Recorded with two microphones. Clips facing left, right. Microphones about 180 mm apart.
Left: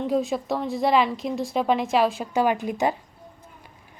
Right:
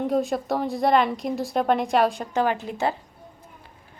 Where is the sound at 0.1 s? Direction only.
Centre (ahead or behind).